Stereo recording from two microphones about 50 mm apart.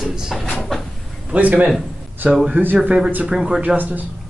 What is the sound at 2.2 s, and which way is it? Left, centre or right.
Speech, right.